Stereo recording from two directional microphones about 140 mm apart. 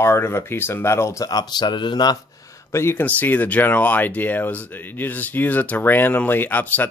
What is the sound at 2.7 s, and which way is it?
Speech, 20° left (ahead or behind).